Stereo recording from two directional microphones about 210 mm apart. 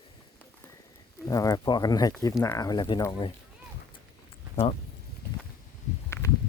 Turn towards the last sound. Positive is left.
turn(degrees=10)  # may be behind; listen again after turning